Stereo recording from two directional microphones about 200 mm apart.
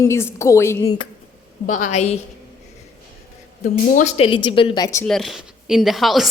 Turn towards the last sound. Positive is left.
turn(degrees=0)  # may be behind; listen again after turning